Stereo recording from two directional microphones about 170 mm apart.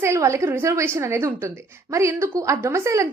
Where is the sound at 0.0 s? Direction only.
15° right (ahead or behind).